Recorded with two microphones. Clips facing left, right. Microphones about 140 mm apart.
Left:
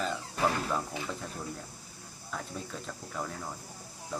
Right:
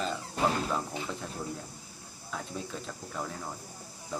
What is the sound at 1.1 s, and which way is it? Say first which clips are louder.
Speech: right 1 dB; centre (ahead or behind).